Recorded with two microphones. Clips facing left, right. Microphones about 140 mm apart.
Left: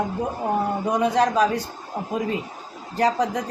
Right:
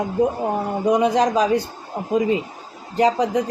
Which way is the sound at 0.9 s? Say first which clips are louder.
Right 3 dB; 15° right (ahead or behind).